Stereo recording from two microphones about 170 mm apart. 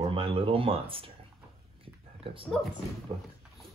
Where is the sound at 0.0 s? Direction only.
30° right (ahead or behind).